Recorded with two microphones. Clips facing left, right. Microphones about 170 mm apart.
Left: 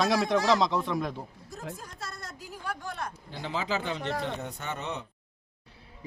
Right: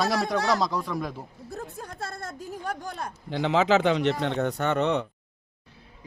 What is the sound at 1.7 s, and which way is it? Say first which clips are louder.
Speech: right 6 dB; 55° right (ahead or behind).